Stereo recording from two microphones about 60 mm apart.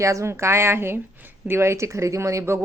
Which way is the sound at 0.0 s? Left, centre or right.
Right.